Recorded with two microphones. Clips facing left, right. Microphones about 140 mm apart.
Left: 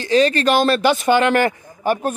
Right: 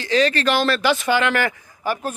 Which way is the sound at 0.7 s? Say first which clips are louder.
Left 4 dB; 40° left (ahead or behind).